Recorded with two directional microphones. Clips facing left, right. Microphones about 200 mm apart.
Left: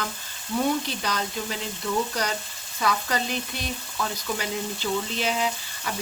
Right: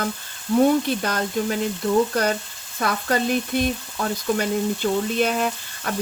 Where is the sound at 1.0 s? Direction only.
50° right (ahead or behind).